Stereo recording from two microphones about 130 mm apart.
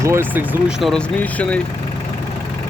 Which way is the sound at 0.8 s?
Centre (ahead or behind).